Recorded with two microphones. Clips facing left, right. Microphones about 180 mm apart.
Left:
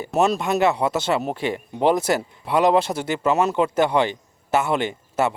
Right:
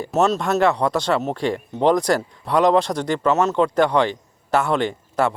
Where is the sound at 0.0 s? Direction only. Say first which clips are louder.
Right 1 dB; 10° left (ahead or behind).